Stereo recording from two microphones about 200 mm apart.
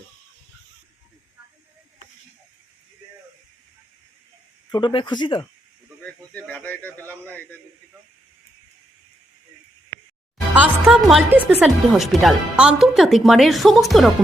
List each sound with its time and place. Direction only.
4.7 s speech: 25° left (ahead or behind)
6.0 s a man's voice: 5° left (ahead or behind)
10.5 s speech: 5° right (ahead or behind)